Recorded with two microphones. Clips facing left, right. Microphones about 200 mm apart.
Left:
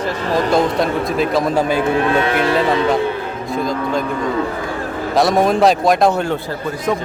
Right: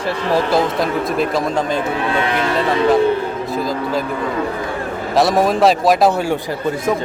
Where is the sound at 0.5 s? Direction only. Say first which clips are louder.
Left 1 dB; centre (ahead or behind).